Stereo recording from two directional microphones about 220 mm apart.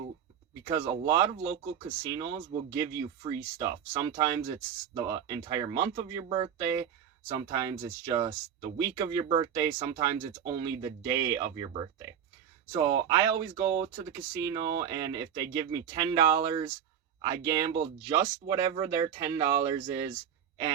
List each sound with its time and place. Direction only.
0.6 s speech: 15° right (ahead or behind)